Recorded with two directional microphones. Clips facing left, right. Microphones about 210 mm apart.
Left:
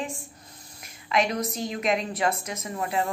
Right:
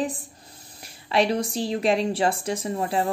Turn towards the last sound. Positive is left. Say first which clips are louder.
# right 3 dB
turn(degrees=-30)  # may be behind; listen again after turning